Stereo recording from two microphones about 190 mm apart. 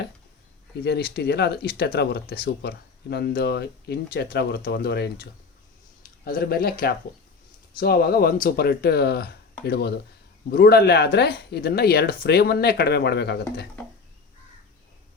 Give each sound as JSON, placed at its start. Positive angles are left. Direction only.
{"t": 0.9, "sound": "speech", "side_deg": 60}